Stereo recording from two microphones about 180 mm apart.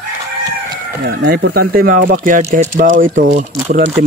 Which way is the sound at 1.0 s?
65° right (ahead or behind).